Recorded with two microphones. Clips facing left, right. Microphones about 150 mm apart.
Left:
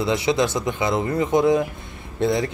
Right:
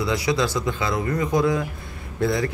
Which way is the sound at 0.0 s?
25° left (ahead or behind).